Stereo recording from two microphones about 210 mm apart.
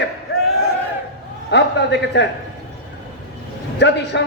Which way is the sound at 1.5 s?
55° left (ahead or behind).